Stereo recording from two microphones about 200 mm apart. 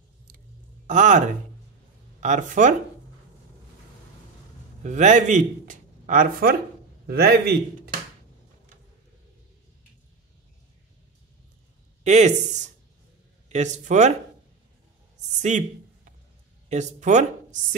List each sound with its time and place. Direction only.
0.8 s speech: 40° right (ahead or behind)
4.8 s a man's voice: 35° right (ahead or behind); by 7.5 s 50° right (ahead or behind)
12.0 s speech: 35° right (ahead or behind)
15.3 s speech: 35° right (ahead or behind)
16.6 s speech: 35° right (ahead or behind)